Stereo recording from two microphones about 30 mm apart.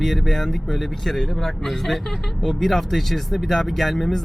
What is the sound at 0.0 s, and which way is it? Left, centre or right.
Speech, centre.